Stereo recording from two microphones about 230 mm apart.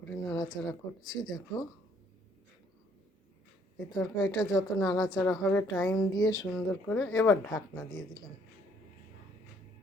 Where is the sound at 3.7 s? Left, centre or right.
Centre.